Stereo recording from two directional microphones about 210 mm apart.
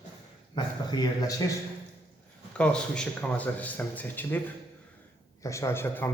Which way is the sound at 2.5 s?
5° left (ahead or behind).